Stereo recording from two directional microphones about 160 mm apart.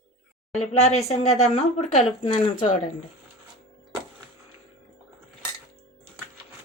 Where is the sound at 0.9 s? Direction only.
40° left (ahead or behind).